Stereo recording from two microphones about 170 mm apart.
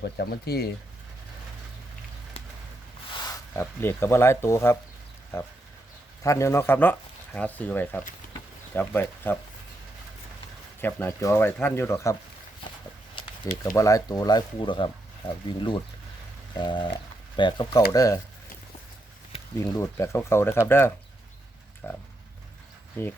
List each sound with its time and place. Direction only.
0.0 s speech: 70° left (ahead or behind)
3.2 s a sound: 20° left (ahead or behind)
3.6 s speech: 15° left (ahead or behind)
6.2 s speech: 15° left (ahead or behind)
10.8 s speech: 10° left (ahead or behind)
13.7 s speech: 20° left (ahead or behind)
19.5 s speech: 15° left (ahead or behind)